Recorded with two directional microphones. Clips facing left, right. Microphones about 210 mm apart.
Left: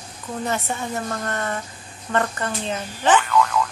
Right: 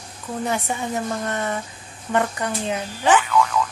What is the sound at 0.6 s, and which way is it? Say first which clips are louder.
Speech: right 2 dB; 15° right (ahead or behind).